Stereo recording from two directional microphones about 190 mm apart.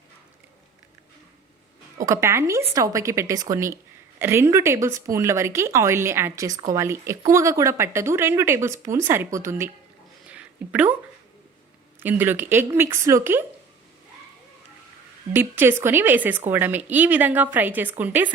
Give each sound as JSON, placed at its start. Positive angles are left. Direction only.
{"t": 2.0, "sound": "speech", "side_deg": -15}
{"t": 10.2, "sound": "a sound", "side_deg": -5}
{"t": 12.0, "sound": "speech", "side_deg": -10}
{"t": 15.4, "sound": "speech", "side_deg": -10}